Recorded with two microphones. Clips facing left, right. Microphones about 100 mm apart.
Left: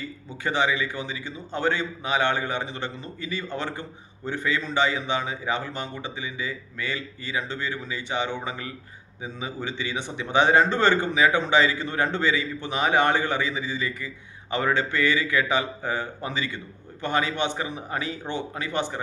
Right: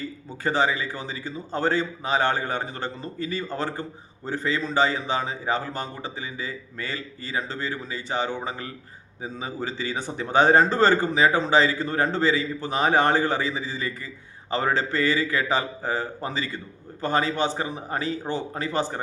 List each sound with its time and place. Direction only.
0.4 s speech: 40° right (ahead or behind)